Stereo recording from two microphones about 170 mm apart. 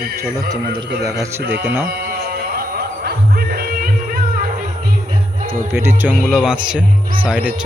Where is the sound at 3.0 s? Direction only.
65° right (ahead or behind).